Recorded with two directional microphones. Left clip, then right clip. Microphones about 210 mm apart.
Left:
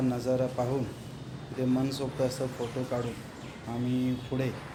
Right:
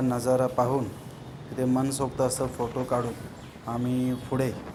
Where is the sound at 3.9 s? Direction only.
10° right (ahead or behind).